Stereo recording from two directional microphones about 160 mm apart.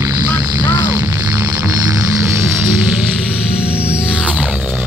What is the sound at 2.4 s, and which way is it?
Music, 15° right (ahead or behind).